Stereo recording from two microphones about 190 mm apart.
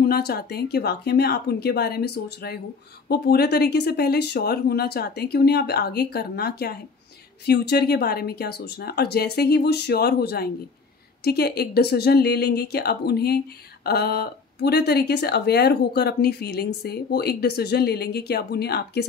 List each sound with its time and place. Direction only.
0.0 s speech: 55° left (ahead or behind)